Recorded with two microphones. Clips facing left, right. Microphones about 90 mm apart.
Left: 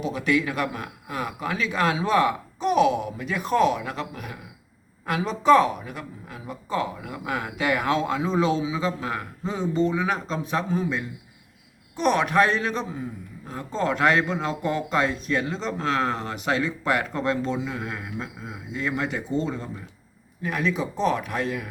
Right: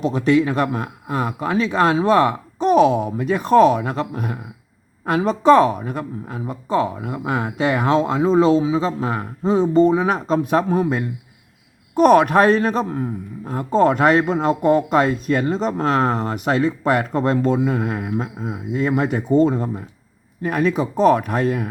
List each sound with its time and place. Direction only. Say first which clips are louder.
0.1 s a man's voice: right 6 dB; 35° right (ahead or behind)